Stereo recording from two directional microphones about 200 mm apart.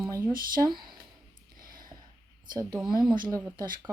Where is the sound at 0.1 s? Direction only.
15° right (ahead or behind).